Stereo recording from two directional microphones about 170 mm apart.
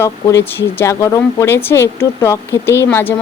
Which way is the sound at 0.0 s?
15° left (ahead or behind).